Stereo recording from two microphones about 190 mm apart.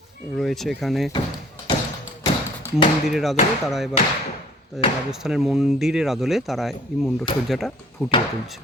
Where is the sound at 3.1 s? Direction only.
Centre (ahead or behind).